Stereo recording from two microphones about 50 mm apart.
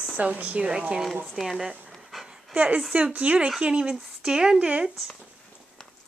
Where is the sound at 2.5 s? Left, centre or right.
Right.